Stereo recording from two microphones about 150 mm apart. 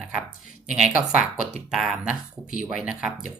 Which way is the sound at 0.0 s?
5° right (ahead or behind).